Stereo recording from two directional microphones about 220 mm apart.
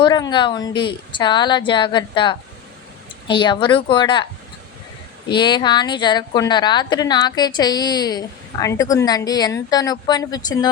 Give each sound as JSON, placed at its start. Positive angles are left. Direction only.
{"t": 0.0, "sound": "a woman's voice", "side_deg": 20}
{"t": 5.3, "sound": "a woman's voice", "side_deg": 20}